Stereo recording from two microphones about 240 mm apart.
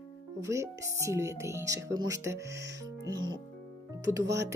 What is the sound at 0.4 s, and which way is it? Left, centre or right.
Speech, centre.